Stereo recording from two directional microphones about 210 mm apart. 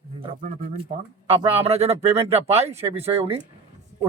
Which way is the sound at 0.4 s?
35° right (ahead or behind).